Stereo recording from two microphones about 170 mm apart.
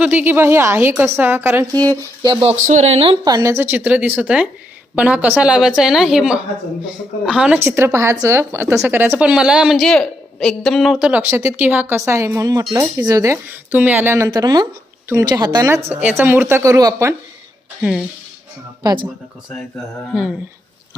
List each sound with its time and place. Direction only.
0.0 s speech: 10° right (ahead or behind)
1.7 s speech: 10° left (ahead or behind)
2.2 s speech: 30° right (ahead or behind)
2.6 s a woman's voice: 45° right (ahead or behind); by 11.2 s 5° right (ahead or behind)
11.2 s speech: 15° right (ahead or behind)
14.3 s a woman's voice: 25° right (ahead or behind)
15.9 s speech: 10° right (ahead or behind)